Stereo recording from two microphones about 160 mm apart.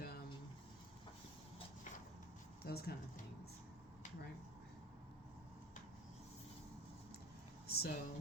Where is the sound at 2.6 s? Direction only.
75° left (ahead or behind).